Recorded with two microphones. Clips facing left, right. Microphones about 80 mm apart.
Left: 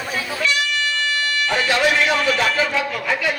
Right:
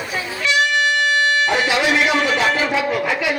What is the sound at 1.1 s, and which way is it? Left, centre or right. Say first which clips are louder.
Music: right 5 dB; right.